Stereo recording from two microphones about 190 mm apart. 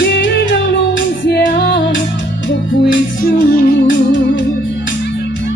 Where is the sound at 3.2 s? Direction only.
50° left (ahead or behind).